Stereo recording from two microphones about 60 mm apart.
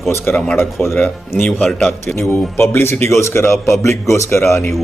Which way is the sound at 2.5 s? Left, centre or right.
Left.